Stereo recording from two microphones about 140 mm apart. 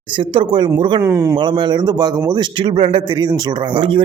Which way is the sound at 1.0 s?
20° right (ahead or behind).